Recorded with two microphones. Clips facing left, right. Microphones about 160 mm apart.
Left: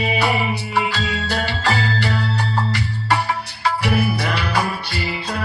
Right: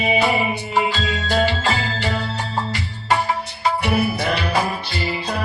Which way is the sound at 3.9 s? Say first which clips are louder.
Right 1 dB; 30° right (ahead or behind).